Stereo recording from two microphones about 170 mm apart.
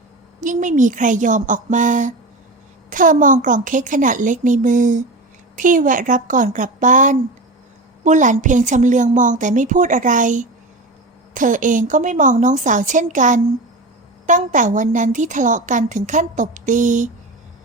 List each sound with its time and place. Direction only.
0.3 s a woman's voice: 50° right (ahead or behind)